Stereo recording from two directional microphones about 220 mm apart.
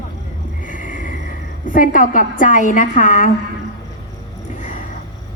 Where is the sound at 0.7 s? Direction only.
35° left (ahead or behind).